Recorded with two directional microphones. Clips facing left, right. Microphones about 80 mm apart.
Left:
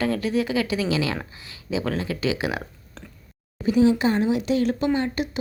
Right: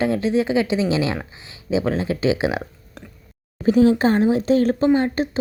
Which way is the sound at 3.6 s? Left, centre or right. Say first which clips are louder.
Right 3 dB; right.